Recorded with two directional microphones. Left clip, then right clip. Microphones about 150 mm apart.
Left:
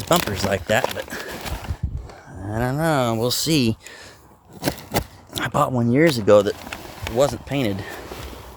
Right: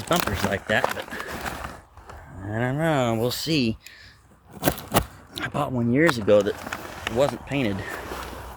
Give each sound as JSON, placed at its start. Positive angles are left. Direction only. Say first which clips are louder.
{"t": 0.2, "sound": "speech", "louder": "left 2 dB", "side_deg": 35}
{"t": 2.6, "sound": "speech", "louder": "left 3 dB", "side_deg": 35}
{"t": 4.6, "sound": "a sound", "louder": "right 1 dB", "side_deg": -20}
{"t": 5.4, "sound": "speech", "louder": "left 6 dB", "side_deg": 40}